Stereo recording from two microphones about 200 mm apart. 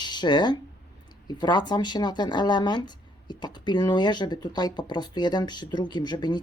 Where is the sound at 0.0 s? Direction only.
20° left (ahead or behind).